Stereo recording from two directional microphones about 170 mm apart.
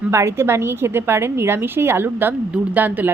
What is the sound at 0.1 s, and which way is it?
A woman's voice, 15° right (ahead or behind).